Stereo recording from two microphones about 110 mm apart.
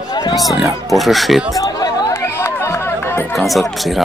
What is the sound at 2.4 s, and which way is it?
Chatter, 25° left (ahead or behind).